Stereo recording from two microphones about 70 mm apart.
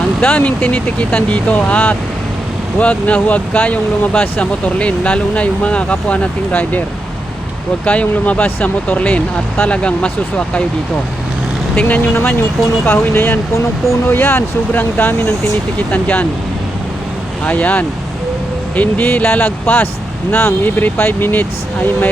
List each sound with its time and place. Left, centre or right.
0.2 s speech: left
7.9 s speech: left
11.8 s speech: left
17.4 s speech: left